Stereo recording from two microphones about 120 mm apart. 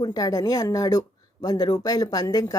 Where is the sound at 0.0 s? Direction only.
30° left (ahead or behind).